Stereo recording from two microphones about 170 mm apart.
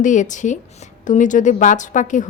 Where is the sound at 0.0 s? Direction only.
50° left (ahead or behind).